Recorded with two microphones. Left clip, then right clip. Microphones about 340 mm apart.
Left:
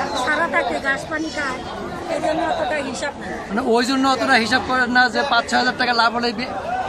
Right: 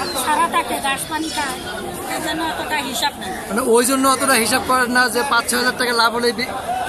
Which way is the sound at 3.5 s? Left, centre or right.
Centre.